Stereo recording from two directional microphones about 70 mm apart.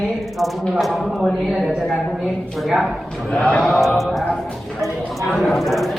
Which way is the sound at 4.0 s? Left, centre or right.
Centre.